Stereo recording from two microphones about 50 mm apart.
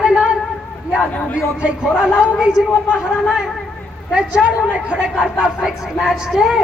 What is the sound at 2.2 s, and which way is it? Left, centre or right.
A man's voice, centre.